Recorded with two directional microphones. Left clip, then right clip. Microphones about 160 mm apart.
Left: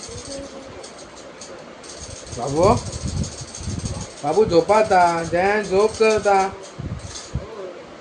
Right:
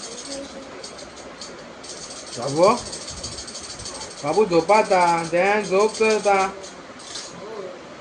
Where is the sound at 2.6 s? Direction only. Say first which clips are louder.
Even; 15° left (ahead or behind).